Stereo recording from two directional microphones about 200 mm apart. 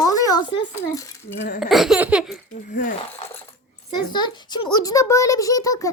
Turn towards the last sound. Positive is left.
turn(degrees=15)  # may be behind; listen again after turning